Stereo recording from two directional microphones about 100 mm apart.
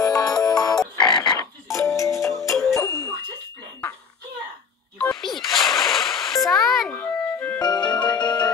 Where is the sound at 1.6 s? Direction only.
30° left (ahead or behind).